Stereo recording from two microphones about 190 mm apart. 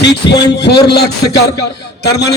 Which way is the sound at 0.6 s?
60° left (ahead or behind).